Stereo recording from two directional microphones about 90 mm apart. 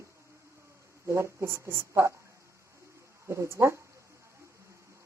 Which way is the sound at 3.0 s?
30° right (ahead or behind).